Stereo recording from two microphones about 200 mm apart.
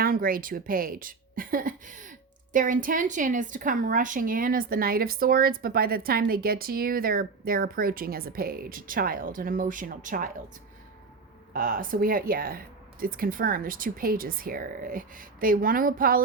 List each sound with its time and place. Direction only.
0.0 s a woman's voice: 45° right (ahead or behind)
11.5 s a woman's voice: 45° right (ahead or behind)